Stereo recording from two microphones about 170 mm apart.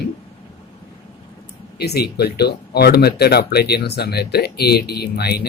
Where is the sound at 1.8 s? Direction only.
75° left (ahead or behind).